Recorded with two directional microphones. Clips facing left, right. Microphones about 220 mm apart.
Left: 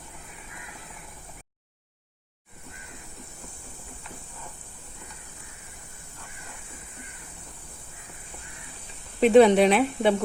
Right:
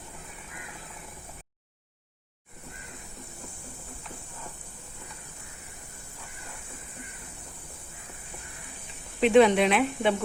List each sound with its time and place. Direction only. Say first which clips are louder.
9.2 s speech: left 3 dB; 40° left (ahead or behind)